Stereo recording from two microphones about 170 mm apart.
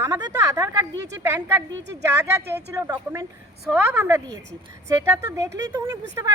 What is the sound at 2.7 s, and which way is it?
Speech, 15° right (ahead or behind).